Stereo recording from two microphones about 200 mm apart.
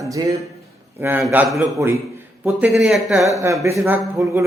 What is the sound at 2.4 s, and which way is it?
Speech, 5° right (ahead or behind).